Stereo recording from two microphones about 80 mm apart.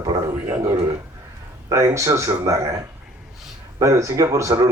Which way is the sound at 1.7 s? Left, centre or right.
Right.